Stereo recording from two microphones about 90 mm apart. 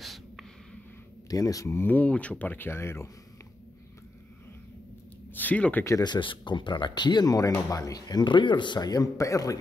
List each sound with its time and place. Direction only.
0.0 s snort: centre (ahead or behind)
1.3 s speech: 40° left (ahead or behind)
1.9 s speech: 15° left (ahead or behind)
5.3 s speech: 20° left (ahead or behind)
6.0 s speech: 60° left (ahead or behind); by 9.6 s 40° left (ahead or behind)